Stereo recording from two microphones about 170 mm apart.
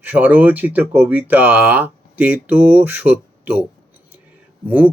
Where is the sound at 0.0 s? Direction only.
10° right (ahead or behind).